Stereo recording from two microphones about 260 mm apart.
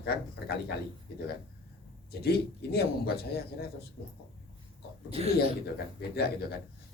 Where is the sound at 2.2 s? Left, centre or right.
Left.